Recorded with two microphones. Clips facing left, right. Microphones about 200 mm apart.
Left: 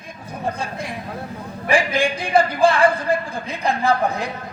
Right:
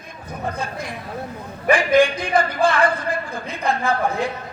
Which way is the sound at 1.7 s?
30° left (ahead or behind).